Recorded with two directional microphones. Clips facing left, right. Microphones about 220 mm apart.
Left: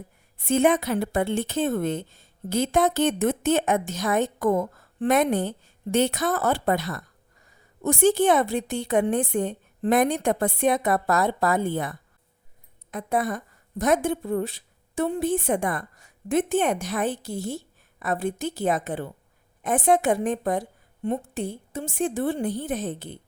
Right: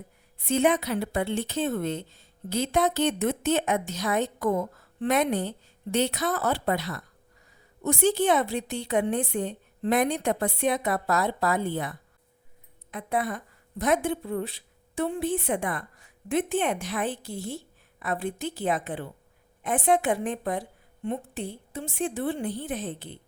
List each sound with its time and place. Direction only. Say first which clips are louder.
0.3 s a woman's voice: left 3 dB; 50° left (ahead or behind)